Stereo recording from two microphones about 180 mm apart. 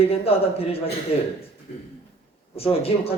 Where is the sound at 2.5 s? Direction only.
30° left (ahead or behind).